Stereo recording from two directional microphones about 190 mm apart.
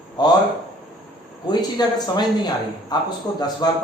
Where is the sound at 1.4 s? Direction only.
20° left (ahead or behind).